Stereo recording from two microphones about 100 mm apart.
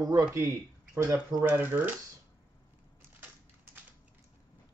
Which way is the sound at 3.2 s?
20° right (ahead or behind).